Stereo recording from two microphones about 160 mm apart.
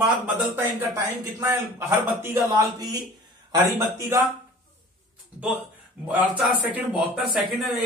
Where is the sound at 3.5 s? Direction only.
20° right (ahead or behind).